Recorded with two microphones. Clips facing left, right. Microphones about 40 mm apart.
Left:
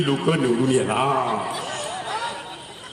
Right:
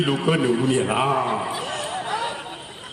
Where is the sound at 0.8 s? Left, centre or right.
Centre.